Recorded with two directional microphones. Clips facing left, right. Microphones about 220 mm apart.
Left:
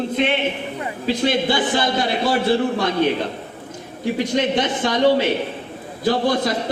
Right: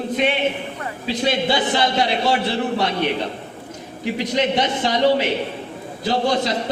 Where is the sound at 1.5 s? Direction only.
50° left (ahead or behind).